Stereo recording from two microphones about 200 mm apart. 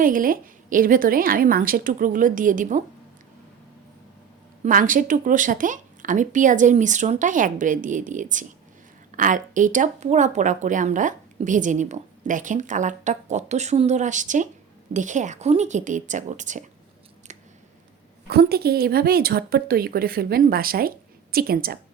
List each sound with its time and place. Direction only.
0.0 s a woman's voice: 45° right (ahead or behind)
4.6 s speech: 40° right (ahead or behind)
18.3 s a woman's voice: 50° right (ahead or behind)